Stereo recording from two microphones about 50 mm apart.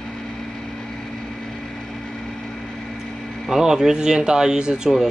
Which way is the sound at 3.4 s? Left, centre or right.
Centre.